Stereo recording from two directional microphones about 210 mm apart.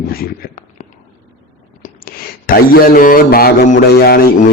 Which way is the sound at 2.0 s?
45° left (ahead or behind).